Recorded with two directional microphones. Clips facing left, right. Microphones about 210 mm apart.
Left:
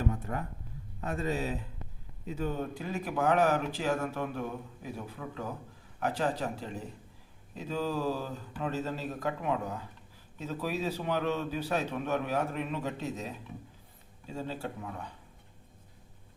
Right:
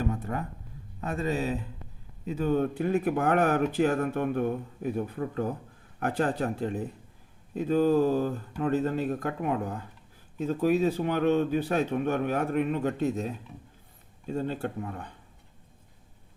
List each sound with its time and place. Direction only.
2.4 s speech: 60° right (ahead or behind)